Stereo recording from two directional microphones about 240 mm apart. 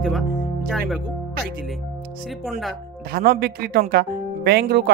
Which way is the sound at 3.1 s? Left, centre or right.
Right.